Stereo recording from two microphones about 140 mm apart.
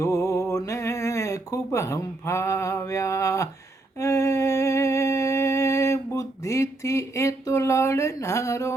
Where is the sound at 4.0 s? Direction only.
25° left (ahead or behind).